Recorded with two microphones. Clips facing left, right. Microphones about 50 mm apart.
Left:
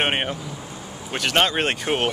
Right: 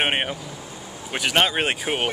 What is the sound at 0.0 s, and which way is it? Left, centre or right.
Vehicle, centre.